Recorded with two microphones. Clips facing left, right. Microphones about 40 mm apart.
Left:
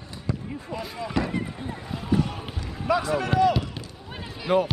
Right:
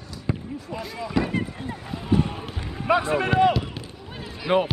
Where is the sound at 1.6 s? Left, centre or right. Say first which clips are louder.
Right 1 dB; centre.